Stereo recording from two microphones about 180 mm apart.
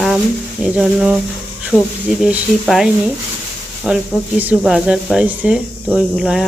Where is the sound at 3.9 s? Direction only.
5° right (ahead or behind).